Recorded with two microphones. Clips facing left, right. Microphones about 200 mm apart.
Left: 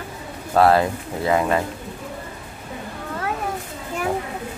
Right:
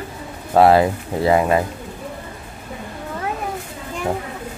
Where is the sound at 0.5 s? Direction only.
25° right (ahead or behind).